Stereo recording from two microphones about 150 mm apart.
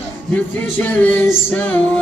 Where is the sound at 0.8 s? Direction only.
10° left (ahead or behind).